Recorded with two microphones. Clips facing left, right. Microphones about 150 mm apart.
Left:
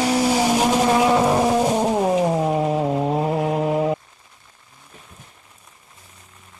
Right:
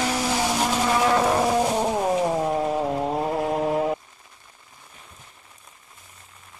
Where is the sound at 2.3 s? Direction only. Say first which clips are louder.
Left 3 dB; 10° left (ahead or behind).